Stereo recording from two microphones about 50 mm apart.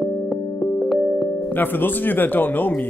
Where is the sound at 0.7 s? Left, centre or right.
Centre.